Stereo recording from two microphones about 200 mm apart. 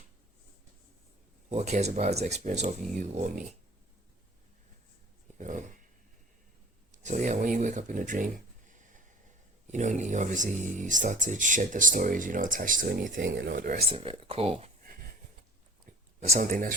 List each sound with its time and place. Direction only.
1.5 s speech: 35° right (ahead or behind)
5.4 s a sound: 40° right (ahead or behind)
6.9 s speech: 40° right (ahead or behind)
13.9 s speech: 30° right (ahead or behind)
16.2 s speech: 35° right (ahead or behind)